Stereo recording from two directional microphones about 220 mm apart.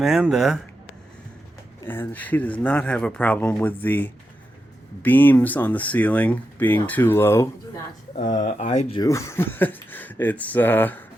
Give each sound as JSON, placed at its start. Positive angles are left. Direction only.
{"t": 0.0, "sound": "speech", "side_deg": 0}
{"t": 1.9, "sound": "speech", "side_deg": 10}
{"t": 8.4, "sound": "speech", "side_deg": 35}
{"t": 9.0, "sound": "speech", "side_deg": 15}